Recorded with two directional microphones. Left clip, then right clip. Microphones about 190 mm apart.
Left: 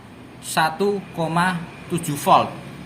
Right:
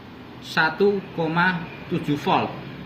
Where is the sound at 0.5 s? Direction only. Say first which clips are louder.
Even; 85° left.